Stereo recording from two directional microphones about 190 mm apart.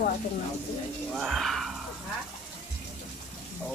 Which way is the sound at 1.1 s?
Centre (ahead or behind).